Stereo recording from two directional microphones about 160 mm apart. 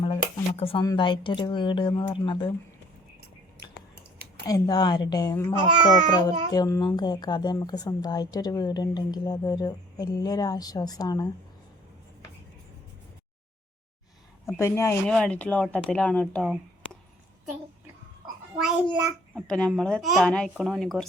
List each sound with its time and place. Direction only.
0.0 s a sound: 35° left (ahead or behind)
0.9 s a woman's voice: 30° left (ahead or behind)
4.4 s a woman's voice: 20° left (ahead or behind)
14.5 s speech: 15° left (ahead or behind); by 16.6 s centre (ahead or behind)
18.6 s a child's voice: 10° right (ahead or behind)
19.5 s speech: 5° left (ahead or behind)